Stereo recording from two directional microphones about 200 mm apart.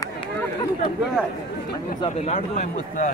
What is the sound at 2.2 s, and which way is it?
Speech, 35° left (ahead or behind).